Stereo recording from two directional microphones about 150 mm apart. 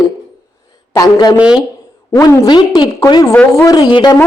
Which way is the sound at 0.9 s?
25° left (ahead or behind).